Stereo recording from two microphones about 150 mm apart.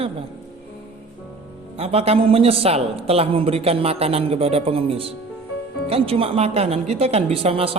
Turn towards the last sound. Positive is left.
turn(degrees=-40)  # may be behind; listen again after turning